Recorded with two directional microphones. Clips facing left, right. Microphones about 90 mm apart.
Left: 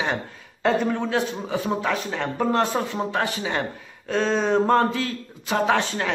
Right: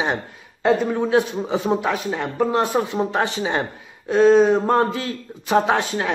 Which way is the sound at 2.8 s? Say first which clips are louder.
Right 4 dB; 20° right (ahead or behind).